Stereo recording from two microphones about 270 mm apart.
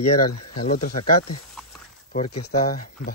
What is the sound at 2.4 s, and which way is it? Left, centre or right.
Speech, left.